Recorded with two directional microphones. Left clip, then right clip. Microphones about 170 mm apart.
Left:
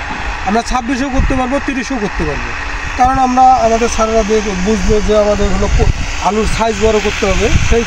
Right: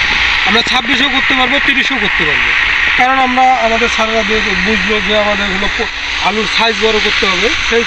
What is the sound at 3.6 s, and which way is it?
Speech, 50° left (ahead or behind).